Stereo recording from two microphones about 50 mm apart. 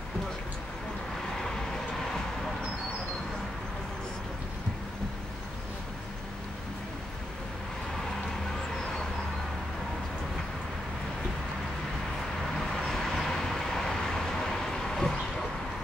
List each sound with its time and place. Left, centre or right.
1.4 s vehicle: centre
12.5 s vehicle: centre